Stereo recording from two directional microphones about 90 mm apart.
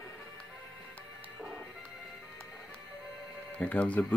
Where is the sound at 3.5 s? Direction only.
15° left (ahead or behind).